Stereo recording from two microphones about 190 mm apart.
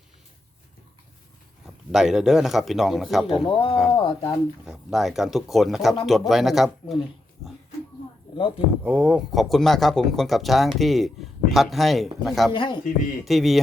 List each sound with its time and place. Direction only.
1.9 s speech: 5° right (ahead or behind)
3.4 s speech: 30° left (ahead or behind)
4.6 s speech: centre (ahead or behind)
8.4 s speech: 25° left (ahead or behind)
8.8 s speech: 5° right (ahead or behind)
12.5 s speech: 25° left (ahead or behind)
13.2 s speech: centre (ahead or behind)